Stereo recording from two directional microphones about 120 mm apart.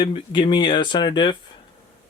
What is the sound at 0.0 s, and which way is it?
Speech, 40° left (ahead or behind).